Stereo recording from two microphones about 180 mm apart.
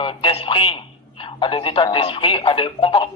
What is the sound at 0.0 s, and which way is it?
A man's voice, 30° left (ahead or behind).